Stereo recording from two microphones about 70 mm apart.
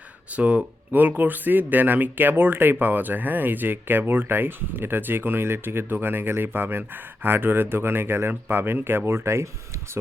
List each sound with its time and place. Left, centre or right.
0.3 s speech: centre; by 10.0 s right